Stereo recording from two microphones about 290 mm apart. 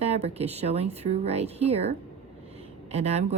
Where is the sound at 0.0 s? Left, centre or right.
Right.